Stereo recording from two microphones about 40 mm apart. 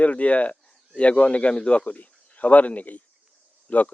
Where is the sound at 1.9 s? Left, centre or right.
Left.